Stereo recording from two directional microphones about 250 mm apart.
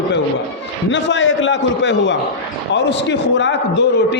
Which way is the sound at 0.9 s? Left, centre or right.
Left.